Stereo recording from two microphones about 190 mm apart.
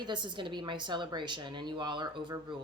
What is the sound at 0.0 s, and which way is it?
Speech, 25° right (ahead or behind).